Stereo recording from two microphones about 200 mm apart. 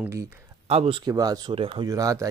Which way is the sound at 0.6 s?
30° right (ahead or behind).